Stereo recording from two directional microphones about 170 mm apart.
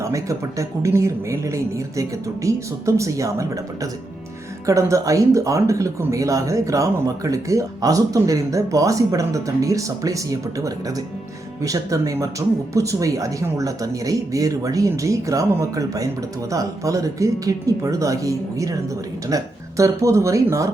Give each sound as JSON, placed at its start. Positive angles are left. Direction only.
{"t": 0.0, "sound": "speech", "side_deg": -20}
{"t": 4.6, "sound": "speech", "side_deg": -20}